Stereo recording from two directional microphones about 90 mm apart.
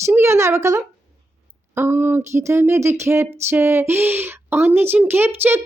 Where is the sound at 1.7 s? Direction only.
25° right (ahead or behind).